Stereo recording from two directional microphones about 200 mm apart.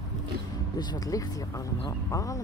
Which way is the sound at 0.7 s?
20° left (ahead or behind).